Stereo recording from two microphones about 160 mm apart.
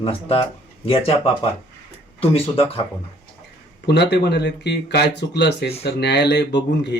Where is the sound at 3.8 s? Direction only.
90° left.